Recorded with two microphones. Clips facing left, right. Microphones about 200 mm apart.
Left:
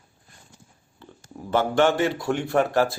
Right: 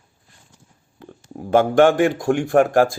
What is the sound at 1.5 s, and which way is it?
Speech, 50° right (ahead or behind).